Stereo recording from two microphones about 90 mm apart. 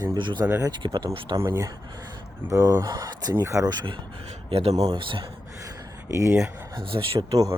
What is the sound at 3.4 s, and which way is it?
Speech, 30° right (ahead or behind).